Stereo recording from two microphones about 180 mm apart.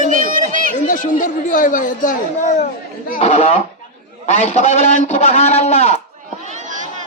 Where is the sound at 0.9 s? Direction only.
50° left (ahead or behind).